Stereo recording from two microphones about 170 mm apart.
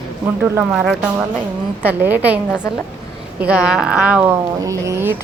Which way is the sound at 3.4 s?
5° right (ahead or behind).